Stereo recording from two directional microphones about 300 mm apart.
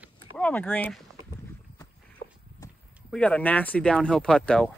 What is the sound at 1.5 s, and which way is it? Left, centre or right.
Horse, centre.